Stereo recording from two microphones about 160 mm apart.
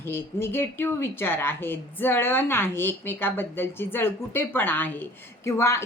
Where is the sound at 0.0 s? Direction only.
15° left (ahead or behind).